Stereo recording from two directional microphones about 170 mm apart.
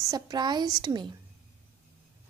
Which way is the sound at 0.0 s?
20° right (ahead or behind).